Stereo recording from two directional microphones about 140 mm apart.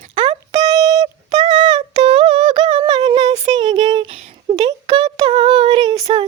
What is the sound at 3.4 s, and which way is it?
Child singing, 30° right (ahead or behind).